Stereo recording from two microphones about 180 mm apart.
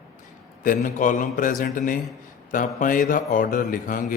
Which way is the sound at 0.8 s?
45° left (ahead or behind).